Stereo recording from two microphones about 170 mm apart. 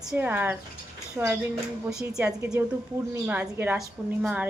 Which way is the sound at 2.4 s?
15° right (ahead or behind).